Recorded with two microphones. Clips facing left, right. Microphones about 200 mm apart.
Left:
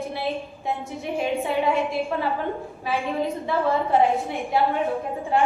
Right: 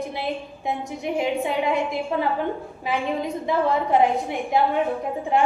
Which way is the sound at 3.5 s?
20° right (ahead or behind).